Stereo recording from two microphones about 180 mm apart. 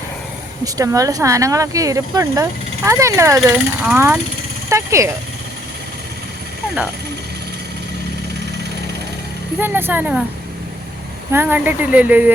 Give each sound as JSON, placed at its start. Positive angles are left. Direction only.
{"t": 0.6, "sound": "speech", "side_deg": -20}
{"t": 9.6, "sound": "speech", "side_deg": -10}
{"t": 11.3, "sound": "speech", "side_deg": -10}